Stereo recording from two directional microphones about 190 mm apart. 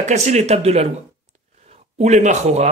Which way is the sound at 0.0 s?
35° right (ahead or behind).